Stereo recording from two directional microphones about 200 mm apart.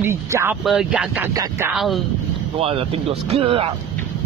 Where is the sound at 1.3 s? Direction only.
15° right (ahead or behind).